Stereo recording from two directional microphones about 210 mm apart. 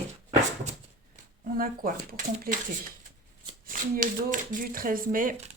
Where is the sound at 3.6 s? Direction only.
40° right (ahead or behind).